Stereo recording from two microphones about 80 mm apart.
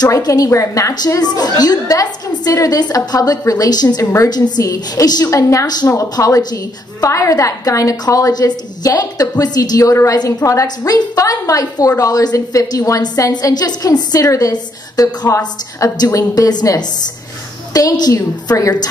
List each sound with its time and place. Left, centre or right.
0.0 s a woman's voice: left
0.9 s a woman's voice: left
4.0 s a woman's voice: left
4.3 s a woman's voice: left
5.2 s a woman's voice: left
13.0 s a woman's voice: left
15.2 s a woman's voice: left